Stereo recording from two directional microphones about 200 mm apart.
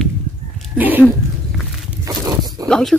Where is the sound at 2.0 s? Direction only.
15° right (ahead or behind).